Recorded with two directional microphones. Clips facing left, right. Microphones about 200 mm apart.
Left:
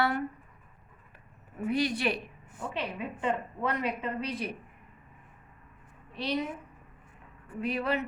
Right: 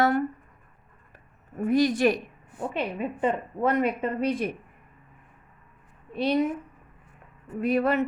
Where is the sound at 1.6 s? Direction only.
45° right (ahead or behind).